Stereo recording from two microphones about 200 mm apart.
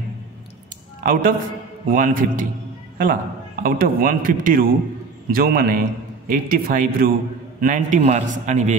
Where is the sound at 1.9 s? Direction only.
45° right (ahead or behind).